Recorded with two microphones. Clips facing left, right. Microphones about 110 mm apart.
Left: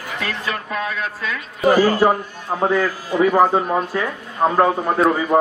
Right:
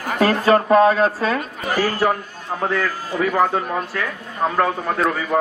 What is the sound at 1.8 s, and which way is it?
A man's voice, 15° left (ahead or behind).